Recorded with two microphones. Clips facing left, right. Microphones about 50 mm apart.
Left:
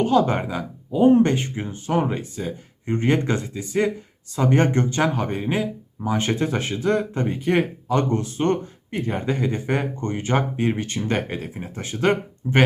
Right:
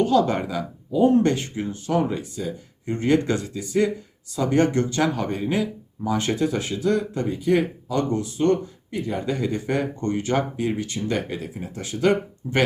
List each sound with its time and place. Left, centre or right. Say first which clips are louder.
0.0 s speech: even; left